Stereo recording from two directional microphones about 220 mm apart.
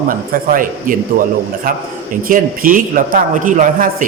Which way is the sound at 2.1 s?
40° right (ahead or behind).